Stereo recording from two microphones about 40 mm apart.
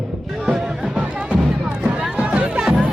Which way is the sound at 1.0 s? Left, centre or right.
Right.